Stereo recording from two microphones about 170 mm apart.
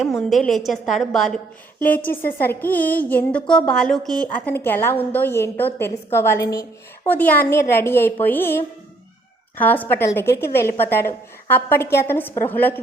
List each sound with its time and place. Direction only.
0.0 s a woman's voice: centre (ahead or behind)